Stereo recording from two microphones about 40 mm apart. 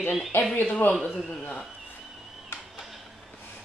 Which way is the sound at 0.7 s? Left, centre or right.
Left.